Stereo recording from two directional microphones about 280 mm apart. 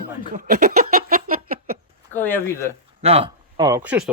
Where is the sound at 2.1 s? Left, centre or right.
Centre.